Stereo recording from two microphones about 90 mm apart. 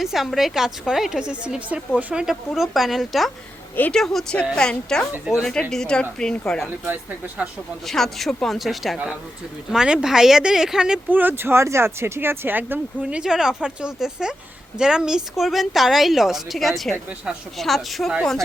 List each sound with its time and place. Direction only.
0.0 s a woman's voice: 5° right (ahead or behind)
2.2 s a woman's voice: 5° right (ahead or behind)
6.8 s speech: 15° right (ahead or behind)
7.9 s a woman's voice: 5° left (ahead or behind)
11.1 s speech: 20° right (ahead or behind)
13.0 s a woman's voice: 10° right (ahead or behind); by 18.4 s 5° left (ahead or behind)